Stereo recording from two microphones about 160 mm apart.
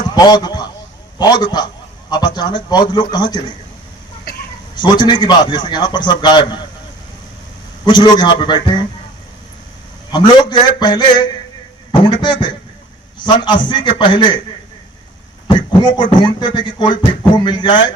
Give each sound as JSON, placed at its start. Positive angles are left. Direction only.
{"t": 0.1, "sound": "a sound", "side_deg": 25}
{"t": 1.2, "sound": "a man's voice", "side_deg": 25}
{"t": 4.8, "sound": "a man's voice", "side_deg": 30}
{"t": 7.9, "sound": "a man's voice", "side_deg": 25}
{"t": 10.1, "sound": "a man's voice", "side_deg": 25}
{"t": 16.0, "sound": "a man's voice", "side_deg": 30}